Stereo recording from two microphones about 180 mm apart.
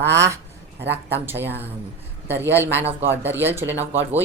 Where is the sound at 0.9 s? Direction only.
10° right (ahead or behind).